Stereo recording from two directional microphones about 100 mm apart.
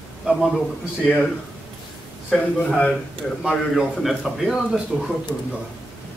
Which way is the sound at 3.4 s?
Centre (ahead or behind).